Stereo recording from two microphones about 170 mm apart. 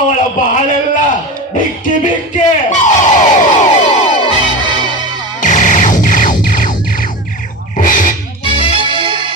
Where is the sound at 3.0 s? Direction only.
45° left (ahead or behind).